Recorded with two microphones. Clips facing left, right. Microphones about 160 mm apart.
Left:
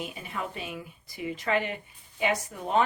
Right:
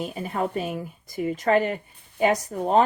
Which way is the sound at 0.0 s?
40° right (ahead or behind).